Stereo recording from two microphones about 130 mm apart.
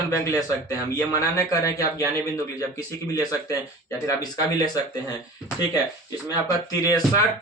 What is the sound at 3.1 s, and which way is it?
Speech, 25° left (ahead or behind).